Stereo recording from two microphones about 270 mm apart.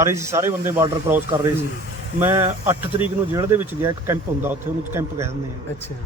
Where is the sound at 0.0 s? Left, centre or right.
Centre.